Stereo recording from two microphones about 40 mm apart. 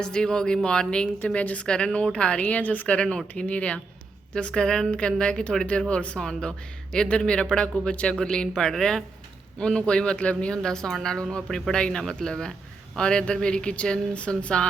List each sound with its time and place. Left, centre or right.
0.0 s a woman's voice: left
1.6 s a woman's voice: left
2.4 s a woman's voice: left
6.9 s a woman's voice: centre
10.6 s a woman's voice: centre